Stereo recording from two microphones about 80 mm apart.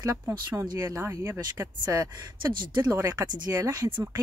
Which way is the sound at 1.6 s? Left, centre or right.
Right.